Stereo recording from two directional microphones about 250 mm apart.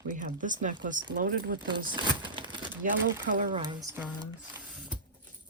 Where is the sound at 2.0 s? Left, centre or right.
Centre.